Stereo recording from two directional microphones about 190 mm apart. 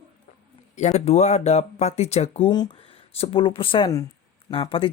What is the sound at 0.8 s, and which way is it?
Speech, 35° left (ahead or behind).